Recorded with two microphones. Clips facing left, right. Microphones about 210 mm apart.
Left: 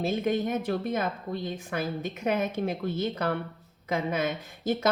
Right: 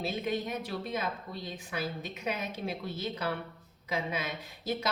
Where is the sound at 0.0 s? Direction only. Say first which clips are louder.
Left 6 dB; 50° left (ahead or behind).